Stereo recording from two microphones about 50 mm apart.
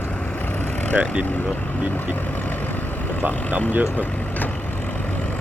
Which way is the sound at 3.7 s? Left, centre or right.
Right.